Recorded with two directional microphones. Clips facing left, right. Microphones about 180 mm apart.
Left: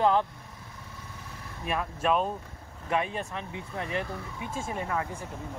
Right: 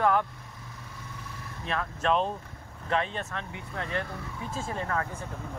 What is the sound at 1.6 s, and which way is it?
Speech, 10° left (ahead or behind).